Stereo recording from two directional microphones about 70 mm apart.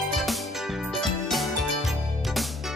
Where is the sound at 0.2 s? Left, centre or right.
Centre.